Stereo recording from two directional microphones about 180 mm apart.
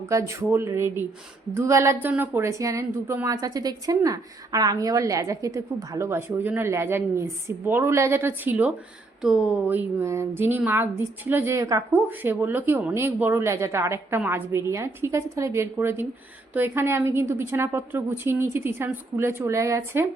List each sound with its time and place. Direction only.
0.0 s a woman's voice: 15° right (ahead or behind)